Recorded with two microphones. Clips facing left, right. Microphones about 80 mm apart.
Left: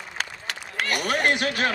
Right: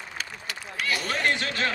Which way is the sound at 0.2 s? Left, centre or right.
Left.